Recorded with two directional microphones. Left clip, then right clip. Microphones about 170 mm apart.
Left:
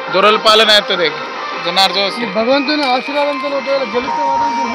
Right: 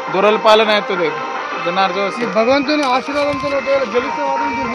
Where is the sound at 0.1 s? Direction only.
75° right (ahead or behind); by 2.0 s 55° right (ahead or behind).